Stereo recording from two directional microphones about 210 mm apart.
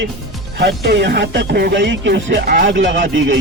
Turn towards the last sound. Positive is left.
turn(degrees=-60)  # may be behind; listen again after turning